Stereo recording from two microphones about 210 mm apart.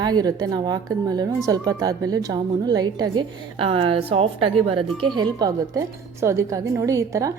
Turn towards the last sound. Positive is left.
turn(degrees=-15)  # may be behind; listen again after turning